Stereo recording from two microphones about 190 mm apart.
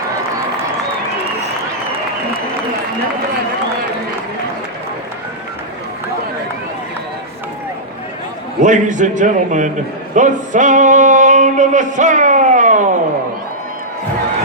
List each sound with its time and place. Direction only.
8.6 s a man's voice: 40° right (ahead or behind)
10.2 s male singing: 40° right (ahead or behind)